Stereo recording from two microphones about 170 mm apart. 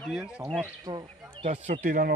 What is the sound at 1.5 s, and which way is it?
Speech, 40° right (ahead or behind).